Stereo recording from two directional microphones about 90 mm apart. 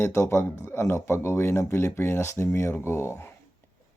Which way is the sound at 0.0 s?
30° left (ahead or behind).